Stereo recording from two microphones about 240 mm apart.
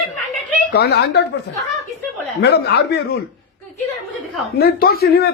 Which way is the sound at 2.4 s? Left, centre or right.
Left.